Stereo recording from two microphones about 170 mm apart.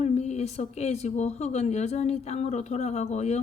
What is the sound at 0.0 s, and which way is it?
A woman's voice, 40° left (ahead or behind).